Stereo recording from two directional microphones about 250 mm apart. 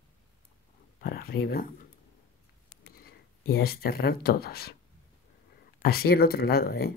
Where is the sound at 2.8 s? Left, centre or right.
Left.